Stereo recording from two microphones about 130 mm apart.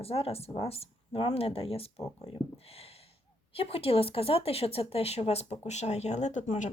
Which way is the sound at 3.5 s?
45° left (ahead or behind).